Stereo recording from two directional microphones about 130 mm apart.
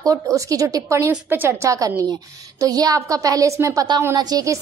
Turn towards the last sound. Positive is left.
turn(degrees=-25)  # may be behind; listen again after turning